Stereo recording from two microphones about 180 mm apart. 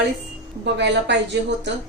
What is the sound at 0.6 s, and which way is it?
Speech, 75° right (ahead or behind).